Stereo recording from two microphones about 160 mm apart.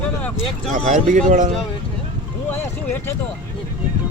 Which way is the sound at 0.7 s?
50° right (ahead or behind).